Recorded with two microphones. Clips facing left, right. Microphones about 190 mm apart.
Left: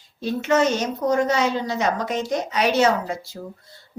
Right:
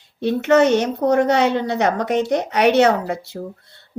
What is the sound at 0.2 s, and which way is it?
Speech, 65° right (ahead or behind).